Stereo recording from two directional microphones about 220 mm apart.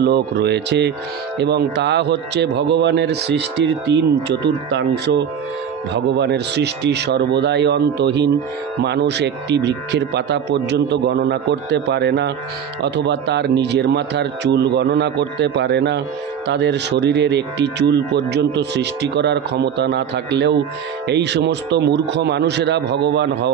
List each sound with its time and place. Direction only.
0.0 s speech: 50° right (ahead or behind)